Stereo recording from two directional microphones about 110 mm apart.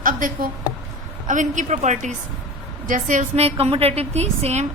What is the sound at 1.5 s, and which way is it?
Speech, 90° right.